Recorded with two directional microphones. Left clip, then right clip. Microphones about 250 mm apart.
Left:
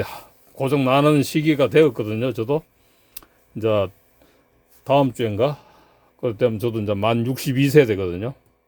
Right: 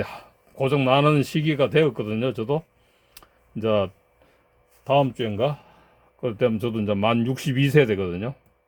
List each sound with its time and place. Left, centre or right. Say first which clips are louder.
0.0 s a man's voice: left 2 dB; centre
3.2 s a sound: left 3 dB; centre
4.8 s a man's voice: left 3 dB; left